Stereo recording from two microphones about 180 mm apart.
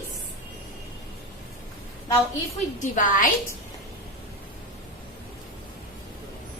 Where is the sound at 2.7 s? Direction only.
45° left (ahead or behind).